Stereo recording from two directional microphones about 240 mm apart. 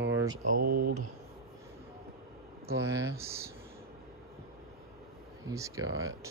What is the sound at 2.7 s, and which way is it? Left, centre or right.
Speech, centre.